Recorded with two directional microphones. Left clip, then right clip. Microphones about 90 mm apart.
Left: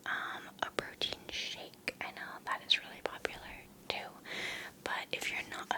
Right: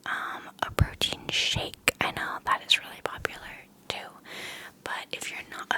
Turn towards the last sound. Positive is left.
turn(degrees=0)  # may be behind; listen again after turning